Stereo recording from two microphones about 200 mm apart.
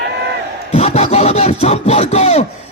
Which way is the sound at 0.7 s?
30° left (ahead or behind).